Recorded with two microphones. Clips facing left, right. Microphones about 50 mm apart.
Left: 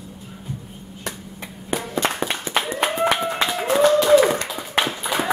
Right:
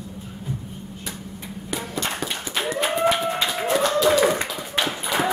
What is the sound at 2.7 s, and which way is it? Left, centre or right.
Clapping, left.